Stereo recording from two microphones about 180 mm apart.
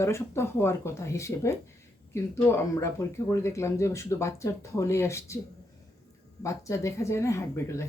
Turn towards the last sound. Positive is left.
turn(degrees=15)  # may be behind; listen again after turning